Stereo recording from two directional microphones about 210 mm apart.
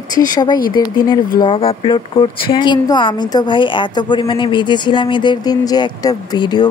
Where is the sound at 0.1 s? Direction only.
20° left (ahead or behind).